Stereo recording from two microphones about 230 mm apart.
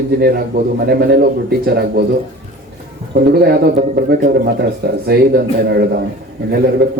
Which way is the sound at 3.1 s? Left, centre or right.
Right.